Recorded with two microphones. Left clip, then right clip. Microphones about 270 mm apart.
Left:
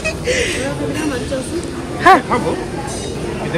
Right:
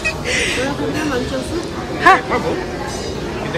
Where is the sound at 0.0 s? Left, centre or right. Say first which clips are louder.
Left 1 dB; centre.